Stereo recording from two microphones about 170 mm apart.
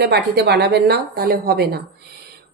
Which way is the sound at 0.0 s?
75° right (ahead or behind).